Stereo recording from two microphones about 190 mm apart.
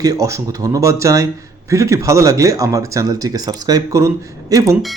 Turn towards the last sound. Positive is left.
turn(degrees=-15)  # may be behind; listen again after turning